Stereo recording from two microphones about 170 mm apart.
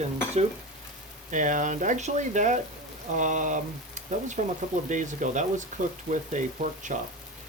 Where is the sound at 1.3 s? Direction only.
50° right (ahead or behind).